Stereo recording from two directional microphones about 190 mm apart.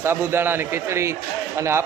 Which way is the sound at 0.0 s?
10° right (ahead or behind).